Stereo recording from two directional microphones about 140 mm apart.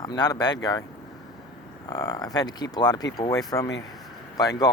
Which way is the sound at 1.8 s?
30° left (ahead or behind).